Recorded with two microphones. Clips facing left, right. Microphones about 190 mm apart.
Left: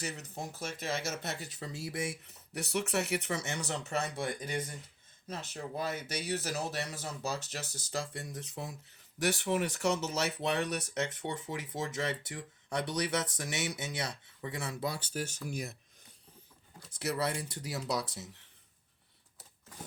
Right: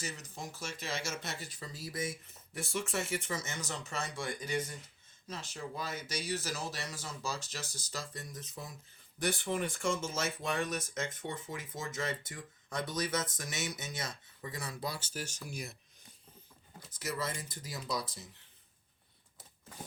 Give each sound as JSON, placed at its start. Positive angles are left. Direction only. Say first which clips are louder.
{"t": 0.5, "sound": "speech", "louder": "left 4 dB", "side_deg": 55}
{"t": 14.8, "sound": "speech", "louder": "left 5 dB", "side_deg": 50}
{"t": 17.0, "sound": "speech", "louder": "left 5 dB", "side_deg": 70}